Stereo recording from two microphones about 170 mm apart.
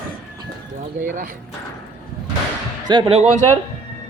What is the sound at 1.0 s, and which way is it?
Speech, 50° right (ahead or behind).